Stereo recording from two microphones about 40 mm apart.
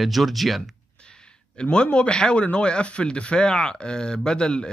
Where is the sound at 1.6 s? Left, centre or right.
Left.